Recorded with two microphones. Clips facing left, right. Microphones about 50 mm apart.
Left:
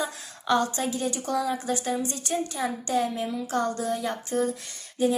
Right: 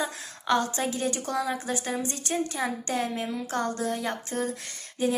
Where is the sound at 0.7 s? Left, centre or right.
Right.